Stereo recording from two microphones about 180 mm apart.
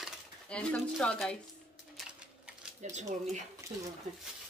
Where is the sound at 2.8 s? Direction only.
40° right (ahead or behind).